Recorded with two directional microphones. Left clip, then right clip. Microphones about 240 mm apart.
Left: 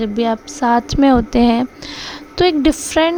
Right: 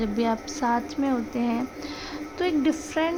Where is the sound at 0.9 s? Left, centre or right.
Left.